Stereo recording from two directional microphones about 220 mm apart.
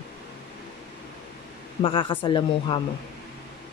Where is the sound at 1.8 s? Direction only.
25° left (ahead or behind).